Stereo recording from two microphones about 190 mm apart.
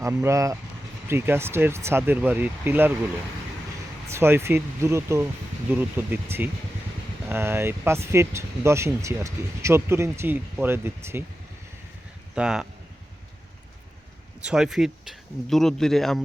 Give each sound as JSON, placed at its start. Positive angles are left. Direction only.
{"t": 0.0, "sound": "speech", "side_deg": -15}
{"t": 4.1, "sound": "speech", "side_deg": -10}
{"t": 12.3, "sound": "speech", "side_deg": -5}
{"t": 14.4, "sound": "speech", "side_deg": -5}